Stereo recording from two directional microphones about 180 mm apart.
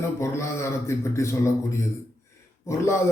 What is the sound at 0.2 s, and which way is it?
A man's voice, 15° left (ahead or behind).